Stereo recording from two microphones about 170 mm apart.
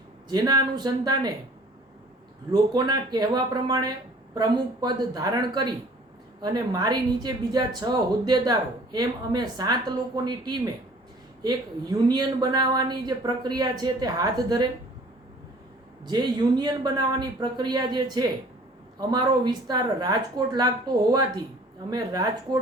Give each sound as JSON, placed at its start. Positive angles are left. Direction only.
{"t": 0.3, "sound": "speech", "side_deg": -25}
{"t": 2.5, "sound": "speech", "side_deg": -20}
{"t": 16.0, "sound": "speech", "side_deg": -25}
{"t": 21.8, "sound": "speech", "side_deg": -25}